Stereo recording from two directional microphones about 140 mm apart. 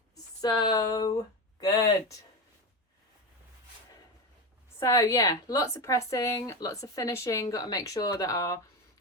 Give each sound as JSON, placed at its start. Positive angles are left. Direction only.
{"t": 0.4, "sound": "speech", "side_deg": 30}
{"t": 4.8, "sound": "speech", "side_deg": 20}